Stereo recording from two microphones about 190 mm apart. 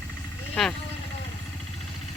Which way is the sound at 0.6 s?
Centre (ahead or behind).